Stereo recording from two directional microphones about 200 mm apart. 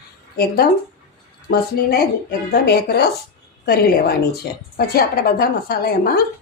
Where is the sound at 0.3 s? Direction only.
50° left (ahead or behind).